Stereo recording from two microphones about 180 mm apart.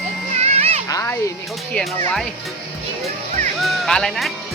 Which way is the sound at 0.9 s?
20° left (ahead or behind).